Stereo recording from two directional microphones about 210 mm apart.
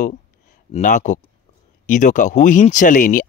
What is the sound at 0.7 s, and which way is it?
Speech, 35° left (ahead or behind).